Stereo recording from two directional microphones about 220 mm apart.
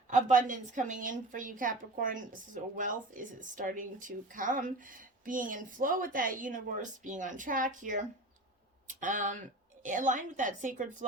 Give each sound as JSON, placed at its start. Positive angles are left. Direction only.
{"t": 0.1, "sound": "a woman's voice", "side_deg": -35}